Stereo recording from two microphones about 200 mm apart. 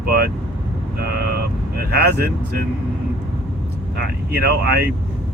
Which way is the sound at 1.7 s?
55° right (ahead or behind).